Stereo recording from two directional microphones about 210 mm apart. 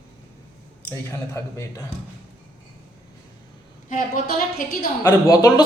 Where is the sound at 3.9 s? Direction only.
40° left (ahead or behind).